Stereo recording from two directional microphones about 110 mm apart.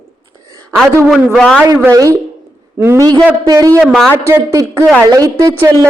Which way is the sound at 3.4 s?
35° right (ahead or behind).